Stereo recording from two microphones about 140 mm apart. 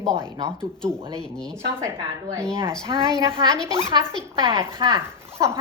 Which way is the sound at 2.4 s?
20° right (ahead or behind).